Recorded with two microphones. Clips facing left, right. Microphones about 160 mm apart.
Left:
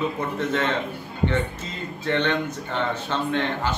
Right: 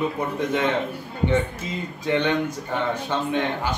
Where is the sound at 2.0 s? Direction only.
10° right (ahead or behind).